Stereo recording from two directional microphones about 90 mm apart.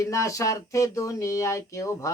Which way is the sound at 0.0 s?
35° left (ahead or behind).